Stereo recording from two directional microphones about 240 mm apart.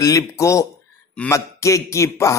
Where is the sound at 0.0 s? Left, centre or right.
Centre.